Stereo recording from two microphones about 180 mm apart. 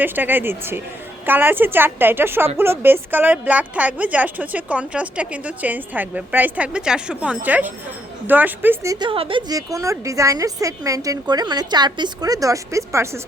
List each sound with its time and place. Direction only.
0.0 s a woman's voice: 10° right (ahead or behind)
9.0 s a woman's voice: 30° right (ahead or behind)